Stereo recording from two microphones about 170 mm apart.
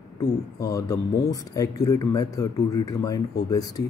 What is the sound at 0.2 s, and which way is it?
Speech, 20° left (ahead or behind).